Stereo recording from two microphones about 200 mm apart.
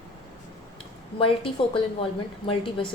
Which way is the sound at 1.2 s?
25° left (ahead or behind).